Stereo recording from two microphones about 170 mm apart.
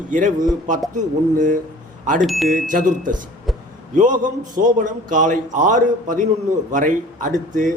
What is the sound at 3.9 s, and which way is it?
A man's voice, 50° right (ahead or behind).